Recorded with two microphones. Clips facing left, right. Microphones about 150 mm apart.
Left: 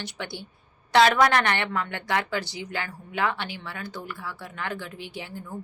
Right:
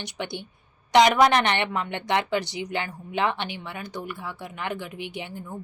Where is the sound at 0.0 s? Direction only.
20° right (ahead or behind).